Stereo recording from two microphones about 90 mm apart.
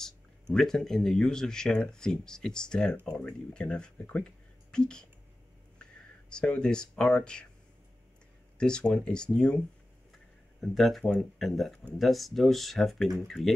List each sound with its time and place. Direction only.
0.0 s speech: 5° left (ahead or behind)
6.3 s speech: 10° left (ahead or behind)
8.5 s speech: 10° left (ahead or behind)
10.6 s speech: centre (ahead or behind)